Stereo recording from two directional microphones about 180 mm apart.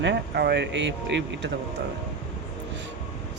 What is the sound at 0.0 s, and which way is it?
Speech, 70° right (ahead or behind).